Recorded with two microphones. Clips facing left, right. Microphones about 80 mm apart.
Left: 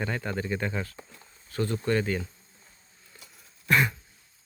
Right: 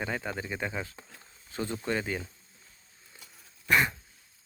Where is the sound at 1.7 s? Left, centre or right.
Centre.